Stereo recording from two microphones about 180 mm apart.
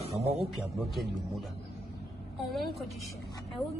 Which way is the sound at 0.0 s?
35° right (ahead or behind).